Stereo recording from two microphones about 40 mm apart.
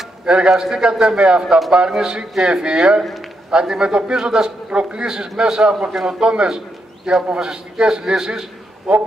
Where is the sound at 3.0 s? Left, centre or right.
Centre.